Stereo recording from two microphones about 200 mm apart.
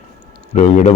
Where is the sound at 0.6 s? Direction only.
35° left (ahead or behind).